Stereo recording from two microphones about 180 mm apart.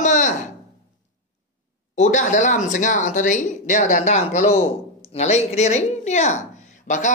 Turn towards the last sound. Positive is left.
turn(degrees=45)  # may be behind; listen again after turning